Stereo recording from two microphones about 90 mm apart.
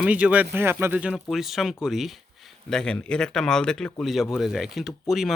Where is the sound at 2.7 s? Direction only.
10° left (ahead or behind).